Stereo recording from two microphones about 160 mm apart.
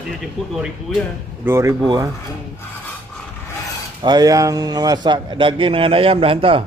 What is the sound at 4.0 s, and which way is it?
A man's voice, 25° right (ahead or behind).